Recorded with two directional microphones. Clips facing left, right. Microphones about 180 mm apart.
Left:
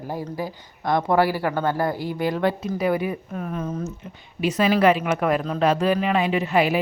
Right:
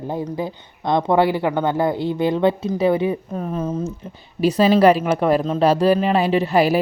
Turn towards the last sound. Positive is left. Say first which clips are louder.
# right 4 dB
turn(degrees=-35)  # may be behind; listen again after turning